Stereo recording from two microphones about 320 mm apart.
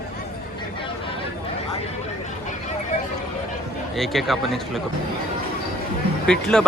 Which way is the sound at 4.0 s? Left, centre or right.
Centre.